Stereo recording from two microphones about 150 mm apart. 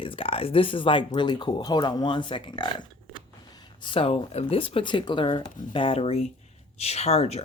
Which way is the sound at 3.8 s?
35° left (ahead or behind).